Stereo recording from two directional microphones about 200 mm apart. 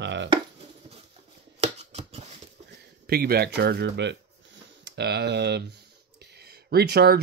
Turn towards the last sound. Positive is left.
turn(degrees=-55)  # may be behind; listen again after turning